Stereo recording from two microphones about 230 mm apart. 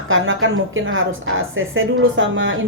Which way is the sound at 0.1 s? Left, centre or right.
Right.